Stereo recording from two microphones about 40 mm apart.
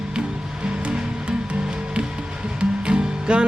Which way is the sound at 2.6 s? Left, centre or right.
Right.